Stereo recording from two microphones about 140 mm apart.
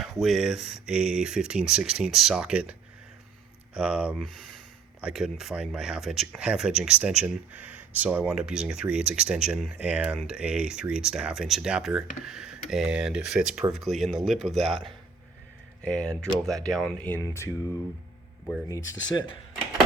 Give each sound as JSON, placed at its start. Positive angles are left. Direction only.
{"t": 0.0, "sound": "speech", "side_deg": 0}
{"t": 3.8, "sound": "speech", "side_deg": -5}
{"t": 15.8, "sound": "speech", "side_deg": 5}
{"t": 18.7, "sound": "speech", "side_deg": 25}